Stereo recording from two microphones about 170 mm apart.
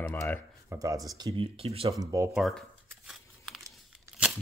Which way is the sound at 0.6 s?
20° right (ahead or behind).